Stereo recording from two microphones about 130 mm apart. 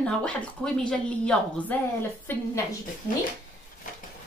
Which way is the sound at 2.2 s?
20° left (ahead or behind).